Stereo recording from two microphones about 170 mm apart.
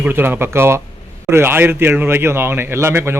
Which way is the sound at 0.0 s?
10° right (ahead or behind).